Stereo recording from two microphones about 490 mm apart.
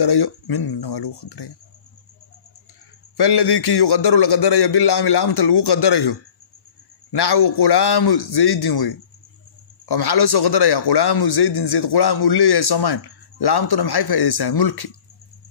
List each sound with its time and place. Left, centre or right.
0.0 s a man's voice: left
3.2 s a man's voice: left